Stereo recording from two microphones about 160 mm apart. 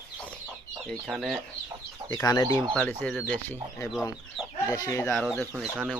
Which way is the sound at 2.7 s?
5° left (ahead or behind).